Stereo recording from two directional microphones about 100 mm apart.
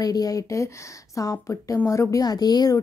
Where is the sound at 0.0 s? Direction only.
40° left (ahead or behind).